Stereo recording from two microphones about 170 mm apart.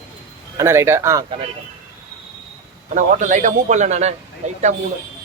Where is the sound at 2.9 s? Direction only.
45° right (ahead or behind).